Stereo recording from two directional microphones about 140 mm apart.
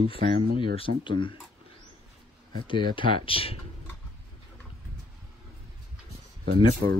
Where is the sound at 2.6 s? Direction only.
35° left (ahead or behind).